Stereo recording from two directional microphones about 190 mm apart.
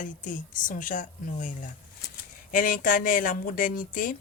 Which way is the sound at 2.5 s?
45° left (ahead or behind).